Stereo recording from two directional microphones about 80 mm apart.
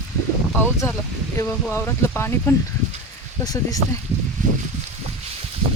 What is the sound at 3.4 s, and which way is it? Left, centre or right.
Speech, left.